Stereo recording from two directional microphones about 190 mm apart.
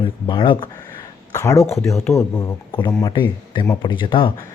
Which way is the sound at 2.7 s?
25° left (ahead or behind).